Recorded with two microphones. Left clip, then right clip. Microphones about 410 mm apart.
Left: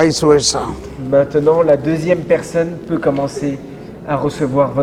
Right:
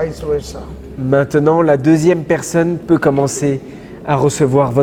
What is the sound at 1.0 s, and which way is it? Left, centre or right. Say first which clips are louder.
A man's voice: even; right.